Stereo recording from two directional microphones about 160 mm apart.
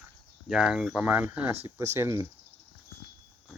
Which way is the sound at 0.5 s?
5° right (ahead or behind).